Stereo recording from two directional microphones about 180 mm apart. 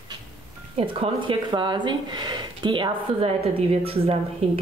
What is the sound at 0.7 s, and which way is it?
Speech, 30° right (ahead or behind).